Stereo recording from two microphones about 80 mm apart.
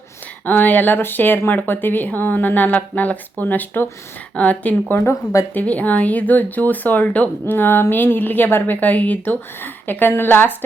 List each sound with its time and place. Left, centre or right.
0.4 s speech: left